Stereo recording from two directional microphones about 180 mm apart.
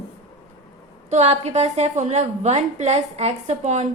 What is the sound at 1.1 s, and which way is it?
A woman's voice, 40° right (ahead or behind).